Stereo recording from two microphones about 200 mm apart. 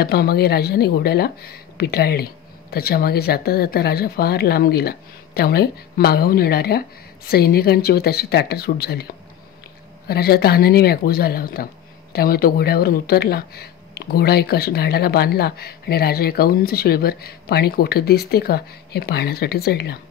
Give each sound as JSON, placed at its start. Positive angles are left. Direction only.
{"t": 0.0, "sound": "speech", "side_deg": 50}
{"t": 10.0, "sound": "speech", "side_deg": 50}